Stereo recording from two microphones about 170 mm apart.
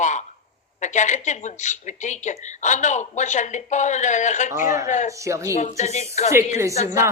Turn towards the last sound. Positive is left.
turn(degrees=45)  # may be behind; listen again after turning